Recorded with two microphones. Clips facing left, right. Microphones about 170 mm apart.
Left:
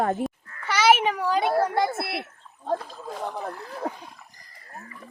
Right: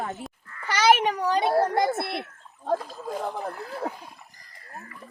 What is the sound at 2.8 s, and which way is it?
A child's voice, 10° right (ahead or behind).